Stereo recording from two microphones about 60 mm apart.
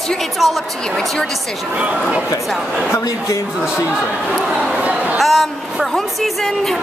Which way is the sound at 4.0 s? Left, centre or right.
Centre.